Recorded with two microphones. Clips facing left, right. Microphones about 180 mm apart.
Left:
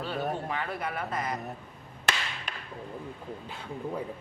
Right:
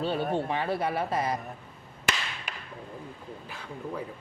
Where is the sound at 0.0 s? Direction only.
30° right (ahead or behind).